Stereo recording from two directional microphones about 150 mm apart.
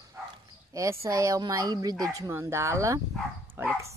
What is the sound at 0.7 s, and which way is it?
Speech, 20° right (ahead or behind).